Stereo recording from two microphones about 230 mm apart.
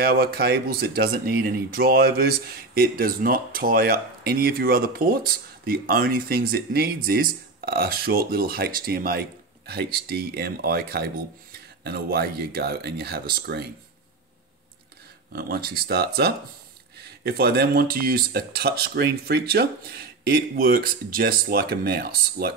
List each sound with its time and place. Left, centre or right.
0.0 s speech: right
15.3 s speech: right
17.2 s speech: right